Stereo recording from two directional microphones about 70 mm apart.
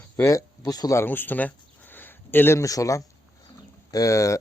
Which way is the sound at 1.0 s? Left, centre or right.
Left.